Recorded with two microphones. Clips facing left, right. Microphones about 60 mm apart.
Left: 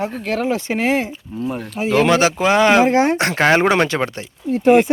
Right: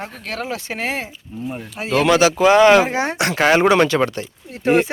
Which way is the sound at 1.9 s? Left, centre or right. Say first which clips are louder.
Even; left.